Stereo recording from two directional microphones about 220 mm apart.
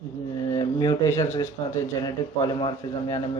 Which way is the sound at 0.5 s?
20° left (ahead or behind).